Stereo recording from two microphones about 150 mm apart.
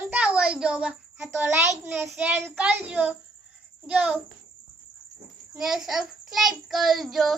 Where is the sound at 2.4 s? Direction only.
5° right (ahead or behind).